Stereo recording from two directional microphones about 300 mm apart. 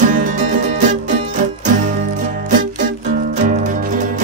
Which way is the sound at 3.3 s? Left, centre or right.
Right.